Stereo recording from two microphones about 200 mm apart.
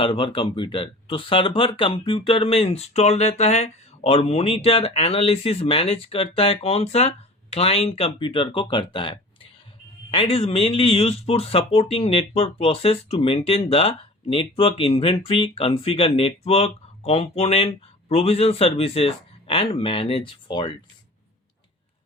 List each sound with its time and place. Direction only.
0.0 s speech: 25° left (ahead or behind)